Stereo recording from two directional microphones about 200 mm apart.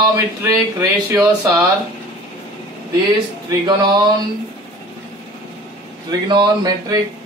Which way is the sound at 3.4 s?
20° right (ahead or behind).